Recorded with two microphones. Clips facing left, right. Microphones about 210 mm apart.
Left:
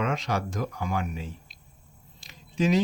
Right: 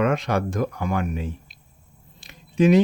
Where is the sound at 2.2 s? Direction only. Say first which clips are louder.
Right 7 dB; 60° right (ahead or behind).